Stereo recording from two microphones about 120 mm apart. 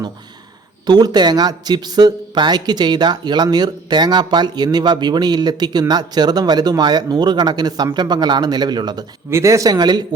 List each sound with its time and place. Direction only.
0.9 s speech: 35° right (ahead or behind)
9.3 s speech: 25° right (ahead or behind)